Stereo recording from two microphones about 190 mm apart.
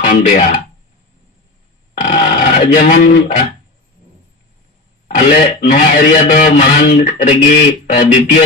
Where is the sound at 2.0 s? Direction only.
35° left (ahead or behind).